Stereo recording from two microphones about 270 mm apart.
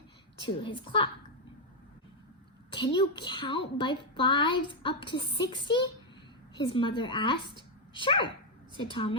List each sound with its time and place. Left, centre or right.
0.4 s a woman's voice: centre
2.9 s a woman's voice: centre